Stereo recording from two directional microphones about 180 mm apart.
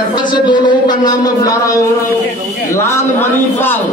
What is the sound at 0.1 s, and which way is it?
A man's voice, 25° left (ahead or behind).